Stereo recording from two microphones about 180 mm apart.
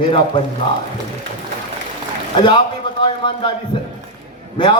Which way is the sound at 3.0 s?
30° left (ahead or behind).